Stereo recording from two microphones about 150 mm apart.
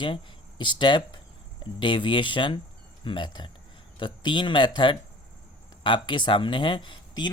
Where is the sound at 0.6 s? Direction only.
30° left (ahead or behind).